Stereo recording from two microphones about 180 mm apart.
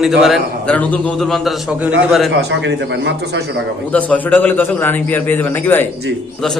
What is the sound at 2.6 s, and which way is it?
A man's voice, 85° right.